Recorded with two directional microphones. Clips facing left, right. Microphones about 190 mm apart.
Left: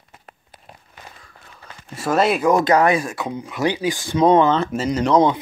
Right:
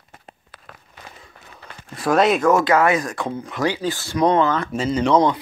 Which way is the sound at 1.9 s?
5° left (ahead or behind).